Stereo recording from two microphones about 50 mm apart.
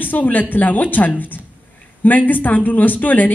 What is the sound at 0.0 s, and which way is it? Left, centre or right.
A woman's voice, left.